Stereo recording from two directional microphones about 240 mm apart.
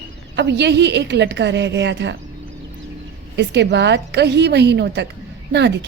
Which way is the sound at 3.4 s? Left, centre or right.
Right.